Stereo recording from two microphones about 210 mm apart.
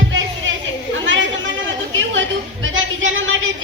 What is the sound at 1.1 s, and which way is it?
Chatter, 65° right (ahead or behind).